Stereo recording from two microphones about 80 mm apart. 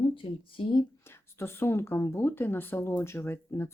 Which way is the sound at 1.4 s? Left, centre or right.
Left.